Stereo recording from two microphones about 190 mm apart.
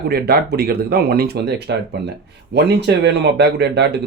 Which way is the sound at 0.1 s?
55° right (ahead or behind).